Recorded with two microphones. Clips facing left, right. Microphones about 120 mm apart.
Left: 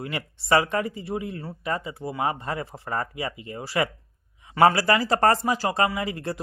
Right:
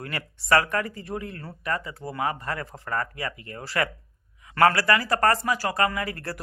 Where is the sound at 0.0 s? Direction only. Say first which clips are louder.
Left 3 dB; 20° left (ahead or behind).